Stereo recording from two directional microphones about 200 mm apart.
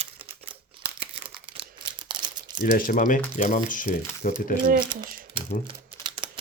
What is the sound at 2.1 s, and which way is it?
Crumpling, 20° right (ahead or behind).